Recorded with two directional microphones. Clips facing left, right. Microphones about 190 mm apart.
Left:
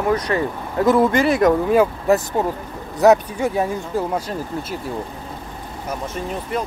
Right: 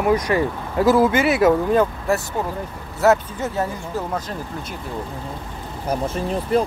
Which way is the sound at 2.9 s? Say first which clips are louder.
Left 3 dB; 15° left (ahead or behind).